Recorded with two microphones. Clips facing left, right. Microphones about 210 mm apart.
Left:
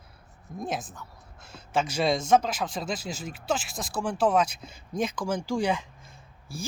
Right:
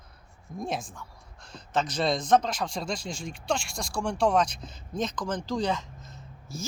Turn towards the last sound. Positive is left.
turn(degrees=10)  # may be behind; listen again after turning